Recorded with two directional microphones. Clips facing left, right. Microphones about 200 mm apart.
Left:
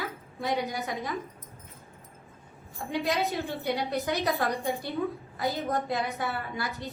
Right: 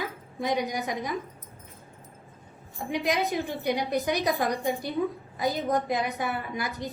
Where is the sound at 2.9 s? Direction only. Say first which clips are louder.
Right 2 dB; 15° right (ahead or behind).